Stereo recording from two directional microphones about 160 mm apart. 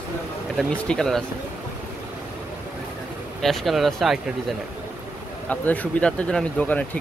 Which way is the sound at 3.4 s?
Centre (ahead or behind).